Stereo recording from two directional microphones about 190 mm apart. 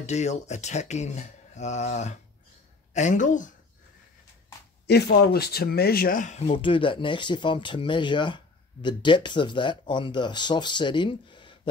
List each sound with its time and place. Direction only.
0.0 s speech: 35° left (ahead or behind)
4.8 s speech: 60° left (ahead or behind); by 11.7 s 25° left (ahead or behind)